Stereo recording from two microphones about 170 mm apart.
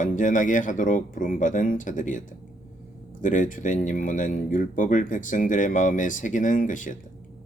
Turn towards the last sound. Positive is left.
turn(degrees=50)  # may be behind; listen again after turning